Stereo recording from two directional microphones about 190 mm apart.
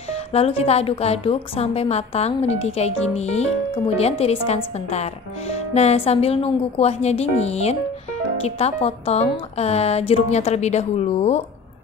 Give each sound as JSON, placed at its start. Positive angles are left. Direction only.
{"t": 0.1, "sound": "a woman's voice", "side_deg": 30}